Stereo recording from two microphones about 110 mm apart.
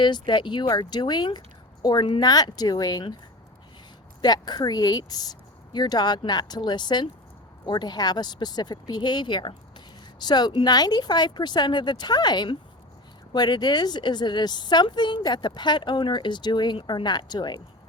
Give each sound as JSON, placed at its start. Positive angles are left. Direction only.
{"t": 0.0, "sound": "speech", "side_deg": 45}
{"t": 4.2, "sound": "speech", "side_deg": 40}